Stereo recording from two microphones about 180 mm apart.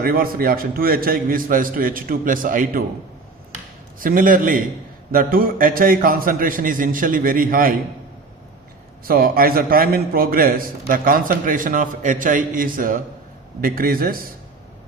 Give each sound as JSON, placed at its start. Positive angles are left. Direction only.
{"t": 0.0, "sound": "a man's voice", "side_deg": -55}
{"t": 4.0, "sound": "a man's voice", "side_deg": -50}
{"t": 9.0, "sound": "a man's voice", "side_deg": -55}